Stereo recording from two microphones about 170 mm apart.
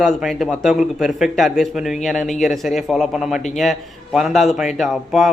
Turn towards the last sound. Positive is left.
turn(degrees=0)  # may be behind; listen again after turning